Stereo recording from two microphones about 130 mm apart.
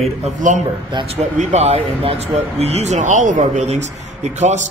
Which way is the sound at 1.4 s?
60° right (ahead or behind).